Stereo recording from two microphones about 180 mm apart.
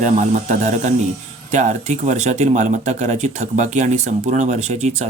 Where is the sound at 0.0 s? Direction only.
45° right (ahead or behind).